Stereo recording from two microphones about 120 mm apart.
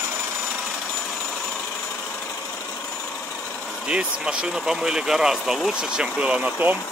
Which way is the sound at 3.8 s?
5° right (ahead or behind).